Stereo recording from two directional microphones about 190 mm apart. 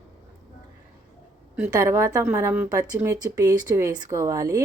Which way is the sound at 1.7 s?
15° right (ahead or behind).